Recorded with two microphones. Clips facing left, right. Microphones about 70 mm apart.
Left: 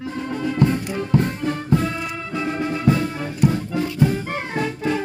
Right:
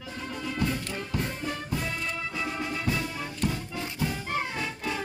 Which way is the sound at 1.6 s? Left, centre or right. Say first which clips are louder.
Left 10 dB; left.